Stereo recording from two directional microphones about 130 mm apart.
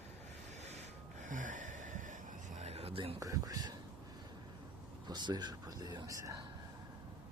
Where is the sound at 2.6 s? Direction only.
55° right (ahead or behind).